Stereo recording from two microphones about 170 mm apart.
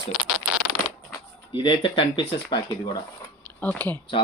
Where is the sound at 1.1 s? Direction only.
25° left (ahead or behind).